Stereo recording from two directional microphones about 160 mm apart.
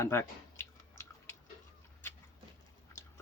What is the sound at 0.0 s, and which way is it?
Chewing, 15° left (ahead or behind).